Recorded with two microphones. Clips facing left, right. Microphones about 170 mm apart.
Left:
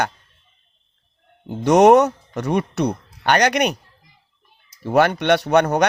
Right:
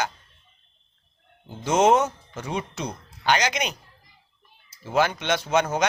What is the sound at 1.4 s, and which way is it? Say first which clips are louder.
Speech: left 7 dB; 65° left (ahead or behind).